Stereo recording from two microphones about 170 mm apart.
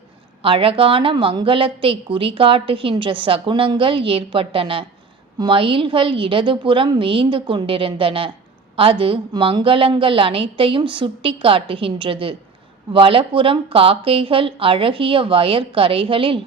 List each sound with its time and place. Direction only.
0.4 s a woman's voice: 30° right (ahead or behind)